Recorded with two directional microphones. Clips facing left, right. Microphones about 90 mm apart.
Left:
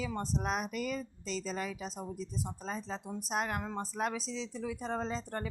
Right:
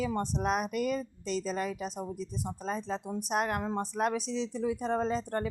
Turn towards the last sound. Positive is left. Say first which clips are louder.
# right 6 dB
turn(degrees=-55)  # may be behind; listen again after turning